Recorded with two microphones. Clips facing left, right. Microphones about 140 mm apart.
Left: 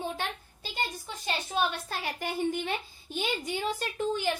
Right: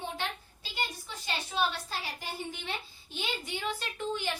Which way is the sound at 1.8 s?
55° left (ahead or behind).